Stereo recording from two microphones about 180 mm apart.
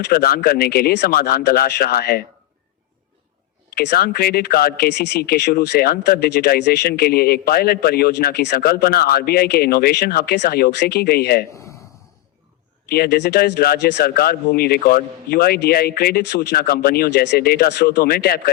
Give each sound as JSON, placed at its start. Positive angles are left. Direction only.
{"t": 0.1, "sound": "speech", "side_deg": 55}
{"t": 3.8, "sound": "speech", "side_deg": 60}
{"t": 12.9, "sound": "speech", "side_deg": 60}